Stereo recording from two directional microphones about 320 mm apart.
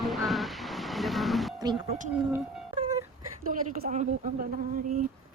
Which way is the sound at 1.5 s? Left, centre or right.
Centre.